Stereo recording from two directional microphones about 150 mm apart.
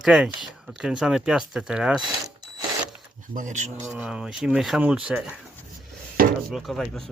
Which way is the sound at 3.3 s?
55° right (ahead or behind).